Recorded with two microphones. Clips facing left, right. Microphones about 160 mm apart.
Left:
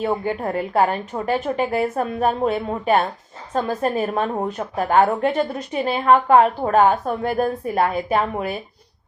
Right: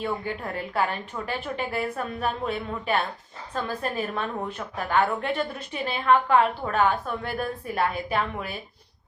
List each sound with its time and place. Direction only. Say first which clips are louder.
0.0 s a woman's voice: left 7 dB; 40° left (ahead or behind)